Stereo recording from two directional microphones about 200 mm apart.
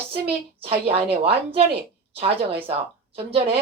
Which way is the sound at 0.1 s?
30° right (ahead or behind).